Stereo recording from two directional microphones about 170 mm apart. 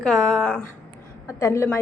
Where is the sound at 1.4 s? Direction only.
15° left (ahead or behind).